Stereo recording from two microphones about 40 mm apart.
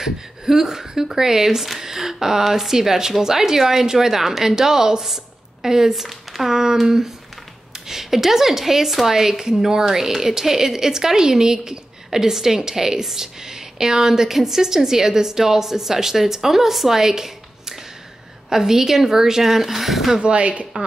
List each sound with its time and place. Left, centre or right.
0.0 s a woman's voice: centre
20.2 s speech: right